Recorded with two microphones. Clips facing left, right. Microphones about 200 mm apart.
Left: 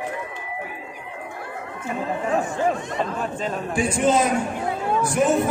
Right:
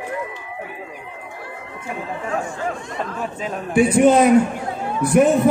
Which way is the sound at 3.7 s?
60° right (ahead or behind).